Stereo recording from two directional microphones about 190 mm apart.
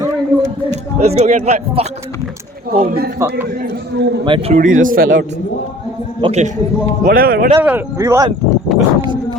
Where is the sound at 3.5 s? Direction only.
55° right (ahead or behind).